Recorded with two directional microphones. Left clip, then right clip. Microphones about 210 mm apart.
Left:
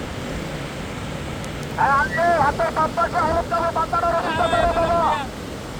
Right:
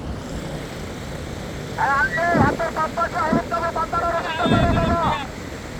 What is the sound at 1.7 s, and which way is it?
Speech, 15° right (ahead or behind).